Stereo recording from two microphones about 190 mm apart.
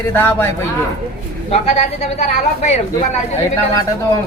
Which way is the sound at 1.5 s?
35° left (ahead or behind).